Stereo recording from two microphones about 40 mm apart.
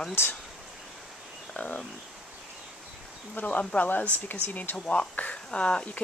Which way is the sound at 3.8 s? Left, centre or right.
Left.